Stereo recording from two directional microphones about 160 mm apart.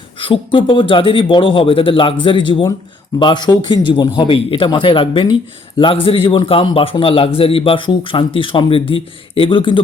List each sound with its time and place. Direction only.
0.2 s a man's voice: 30° left (ahead or behind)